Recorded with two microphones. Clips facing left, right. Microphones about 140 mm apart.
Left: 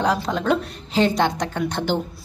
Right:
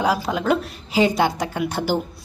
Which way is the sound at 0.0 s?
5° right (ahead or behind).